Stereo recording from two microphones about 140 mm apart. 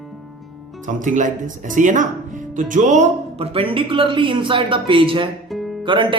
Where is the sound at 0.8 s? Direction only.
65° right (ahead or behind); by 5.3 s 35° right (ahead or behind).